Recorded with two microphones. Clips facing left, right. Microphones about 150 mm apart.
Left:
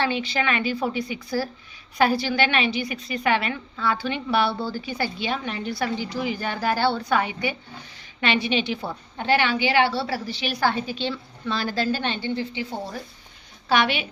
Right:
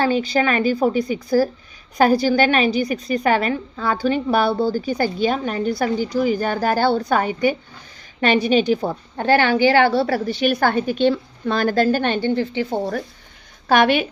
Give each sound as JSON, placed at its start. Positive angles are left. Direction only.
{"t": 0.0, "sound": "a woman's voice", "side_deg": -40}